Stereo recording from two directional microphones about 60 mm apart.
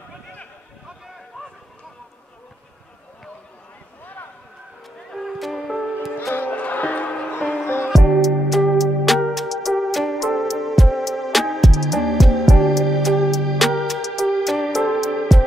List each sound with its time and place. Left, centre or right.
4.0 s a sound: left
5.1 s music: centre
6.3 s music: left
7.9 s music: centre